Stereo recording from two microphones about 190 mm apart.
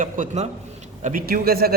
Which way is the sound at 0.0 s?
45° right (ahead or behind).